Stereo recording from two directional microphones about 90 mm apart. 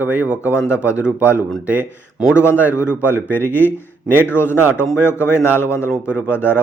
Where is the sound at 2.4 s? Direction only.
25° left (ahead or behind).